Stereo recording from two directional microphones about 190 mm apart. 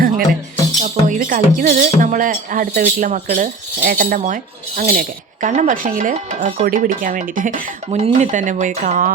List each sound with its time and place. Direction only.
0.8 s speech: 40° right (ahead or behind)